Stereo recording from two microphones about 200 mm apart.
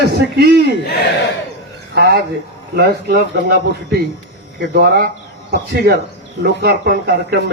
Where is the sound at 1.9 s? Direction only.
55° right (ahead or behind).